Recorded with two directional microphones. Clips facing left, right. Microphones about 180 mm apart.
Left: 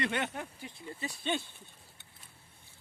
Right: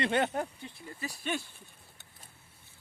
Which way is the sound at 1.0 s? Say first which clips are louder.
Left 1 dB; 25° left (ahead or behind).